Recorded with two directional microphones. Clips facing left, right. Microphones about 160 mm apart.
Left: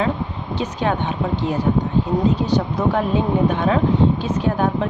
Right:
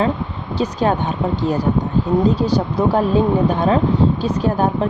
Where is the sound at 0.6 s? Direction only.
40° right (ahead or behind).